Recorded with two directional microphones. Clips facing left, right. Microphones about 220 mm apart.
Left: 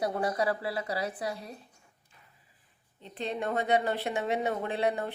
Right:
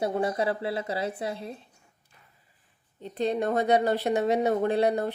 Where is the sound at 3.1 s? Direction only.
40° right (ahead or behind).